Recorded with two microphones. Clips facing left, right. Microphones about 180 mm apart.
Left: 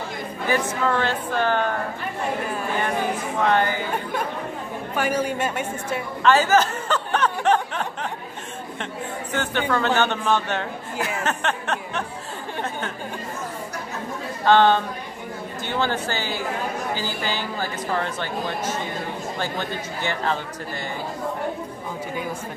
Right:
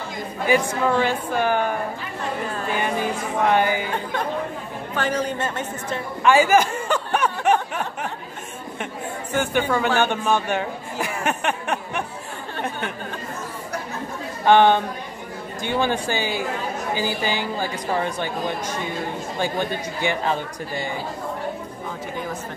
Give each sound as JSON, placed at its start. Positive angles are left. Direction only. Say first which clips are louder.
{"t": 0.5, "sound": "a man's voice", "louder": "right 3 dB", "side_deg": -10}
{"t": 3.4, "sound": "a man's voice", "louder": "right 2 dB", "side_deg": -15}
{"t": 4.9, "sound": "a woman's voice", "louder": "left 1 dB", "side_deg": 10}
{"t": 6.2, "sound": "chuckle", "louder": "right 2 dB", "side_deg": -10}
{"t": 9.3, "sound": "a man's voice", "louder": "right 3 dB", "side_deg": -10}
{"t": 14.4, "sound": "a man's voice", "louder": "right 1 dB", "side_deg": -15}